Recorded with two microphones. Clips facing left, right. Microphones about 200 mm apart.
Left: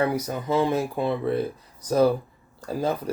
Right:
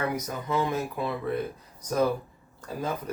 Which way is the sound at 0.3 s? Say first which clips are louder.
Left 5 dB; 30° left (ahead or behind).